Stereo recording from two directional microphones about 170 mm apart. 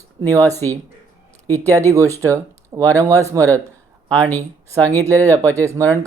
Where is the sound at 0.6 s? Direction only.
10° left (ahead or behind).